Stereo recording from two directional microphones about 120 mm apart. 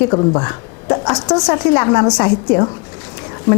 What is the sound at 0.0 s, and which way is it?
A woman's voice, 25° left (ahead or behind).